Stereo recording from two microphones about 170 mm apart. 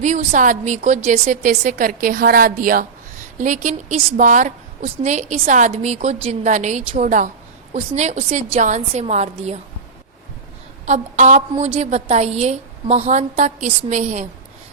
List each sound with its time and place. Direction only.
0.0 s a woman's voice: 45° right (ahead or behind)
10.8 s a woman's voice: 45° right (ahead or behind)